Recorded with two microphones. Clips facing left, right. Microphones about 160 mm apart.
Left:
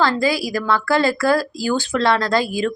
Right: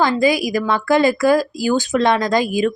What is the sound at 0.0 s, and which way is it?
A woman's voice, 15° right (ahead or behind).